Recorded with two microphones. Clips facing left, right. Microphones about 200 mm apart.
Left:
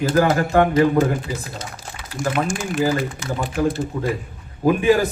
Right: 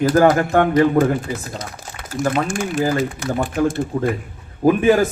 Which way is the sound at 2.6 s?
50° right (ahead or behind).